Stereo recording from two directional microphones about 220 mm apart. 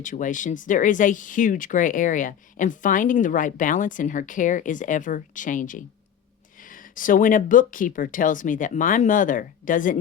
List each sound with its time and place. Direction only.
0.0 s speech: 35° left (ahead or behind)